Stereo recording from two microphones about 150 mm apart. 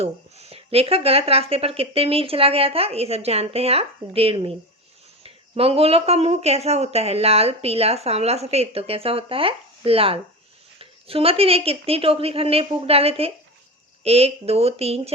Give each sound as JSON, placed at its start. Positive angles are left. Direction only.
{"t": 0.0, "sound": "a woman's voice", "side_deg": -45}